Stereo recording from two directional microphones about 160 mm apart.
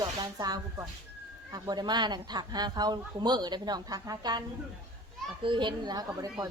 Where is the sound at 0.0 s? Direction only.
25° right (ahead or behind).